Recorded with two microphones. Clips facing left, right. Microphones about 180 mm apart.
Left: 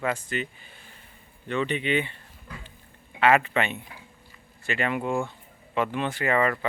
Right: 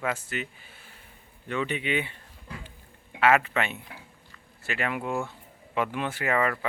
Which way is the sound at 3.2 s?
Centre (ahead or behind).